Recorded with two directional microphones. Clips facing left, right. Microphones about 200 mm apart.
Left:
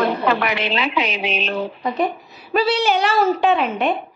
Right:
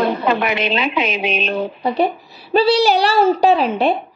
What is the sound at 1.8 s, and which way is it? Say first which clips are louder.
Speech: right 3 dB; 30° right (ahead or behind).